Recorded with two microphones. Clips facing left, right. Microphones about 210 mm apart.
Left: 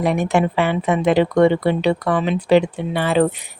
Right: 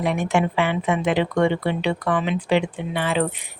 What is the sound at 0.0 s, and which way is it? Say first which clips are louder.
A woman's voice: left 3 dB; 40° left (ahead or behind).